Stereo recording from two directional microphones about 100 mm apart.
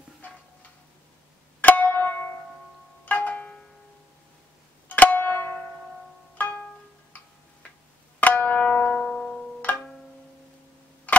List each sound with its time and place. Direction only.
1.6 s music: 15° left (ahead or behind)
4.8 s music: 15° left (ahead or behind)
8.2 s music: 15° left (ahead or behind)
11.1 s tick-tock: 15° left (ahead or behind)